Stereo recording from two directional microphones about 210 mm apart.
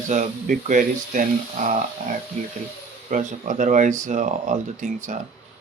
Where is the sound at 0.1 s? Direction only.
40° right (ahead or behind).